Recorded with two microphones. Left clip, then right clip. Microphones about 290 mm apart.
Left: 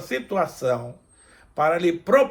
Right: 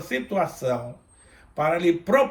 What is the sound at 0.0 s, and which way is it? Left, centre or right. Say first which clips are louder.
Speech: left 1 dB; centre.